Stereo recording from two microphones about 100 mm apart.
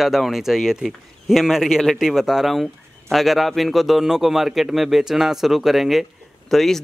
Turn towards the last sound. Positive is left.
turn(degrees=5)  # may be behind; listen again after turning